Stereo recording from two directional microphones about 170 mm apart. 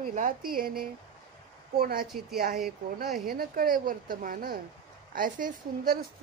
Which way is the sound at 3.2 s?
60° right (ahead or behind).